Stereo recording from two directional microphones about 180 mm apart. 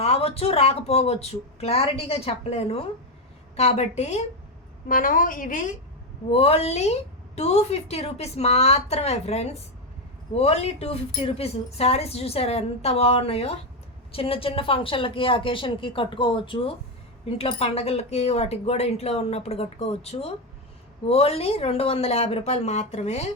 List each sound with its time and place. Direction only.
0.0 s a woman's voice: 35° left (ahead or behind)
4.9 s a woman's voice: 50° left (ahead or behind)
6.3 s a woman's voice: 35° left (ahead or behind)